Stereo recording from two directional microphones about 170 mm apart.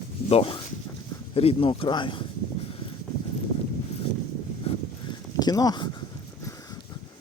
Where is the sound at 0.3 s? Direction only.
35° left (ahead or behind).